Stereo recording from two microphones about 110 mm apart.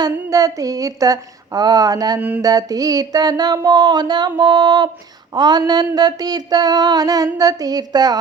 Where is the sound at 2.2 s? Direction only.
15° right (ahead or behind).